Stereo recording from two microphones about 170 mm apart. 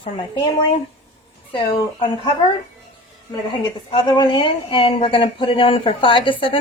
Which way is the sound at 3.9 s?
30° left (ahead or behind).